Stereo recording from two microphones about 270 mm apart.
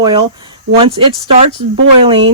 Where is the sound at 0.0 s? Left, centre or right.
Centre.